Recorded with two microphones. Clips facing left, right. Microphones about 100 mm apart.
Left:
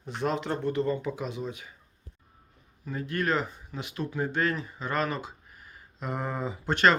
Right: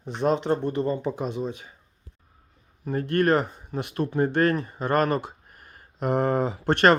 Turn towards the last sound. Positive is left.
turn(degrees=-60)  # may be behind; listen again after turning